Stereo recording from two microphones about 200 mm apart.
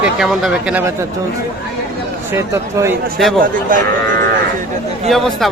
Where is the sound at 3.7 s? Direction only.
40° right (ahead or behind).